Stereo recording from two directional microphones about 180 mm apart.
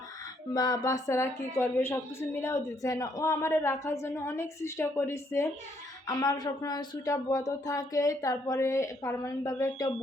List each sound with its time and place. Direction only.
0.5 s a woman's voice: 20° left (ahead or behind)